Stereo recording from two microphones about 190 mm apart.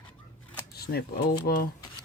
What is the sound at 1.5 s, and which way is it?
Speech, 45° left (ahead or behind).